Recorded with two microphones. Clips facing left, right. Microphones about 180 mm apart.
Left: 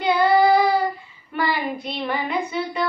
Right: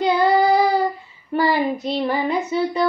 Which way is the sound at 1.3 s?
35° right (ahead or behind).